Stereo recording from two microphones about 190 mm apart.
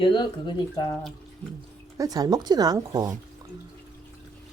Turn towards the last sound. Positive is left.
turn(degrees=-20)  # may be behind; listen again after turning